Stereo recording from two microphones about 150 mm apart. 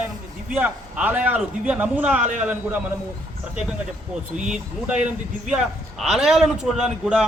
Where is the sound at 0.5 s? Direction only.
10° right (ahead or behind).